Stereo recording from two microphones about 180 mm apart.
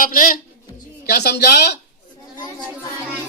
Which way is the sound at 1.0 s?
60° left (ahead or behind).